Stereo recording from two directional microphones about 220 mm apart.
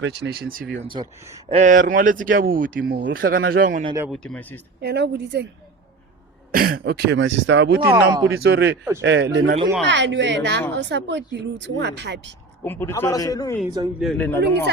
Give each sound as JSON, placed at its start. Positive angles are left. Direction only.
{"t": 0.0, "sound": "a woman's voice", "side_deg": -50}
{"t": 0.9, "sound": "speech", "side_deg": -20}
{"t": 1.5, "sound": "speech", "side_deg": -35}
{"t": 3.8, "sound": "speech", "side_deg": -10}
{"t": 4.1, "sound": "speech", "side_deg": 5}
{"t": 4.8, "sound": "a woman's voice", "side_deg": -50}
{"t": 6.5, "sound": "a woman's voice", "side_deg": -40}
{"t": 7.9, "sound": "speech", "side_deg": -20}
{"t": 8.4, "sound": "a woman's voice", "side_deg": -50}
{"t": 12.6, "sound": "a man's voice", "side_deg": 10}
{"t": 14.0, "sound": "a man's voice", "side_deg": 5}